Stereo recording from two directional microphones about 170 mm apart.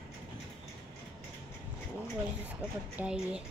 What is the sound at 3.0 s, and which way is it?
Speech, 5° right (ahead or behind).